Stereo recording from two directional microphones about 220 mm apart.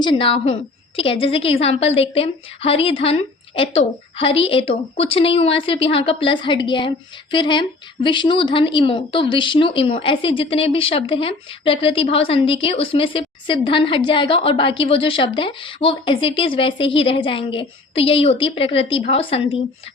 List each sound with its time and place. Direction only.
0.0 s a woman's voice: 20° left (ahead or behind)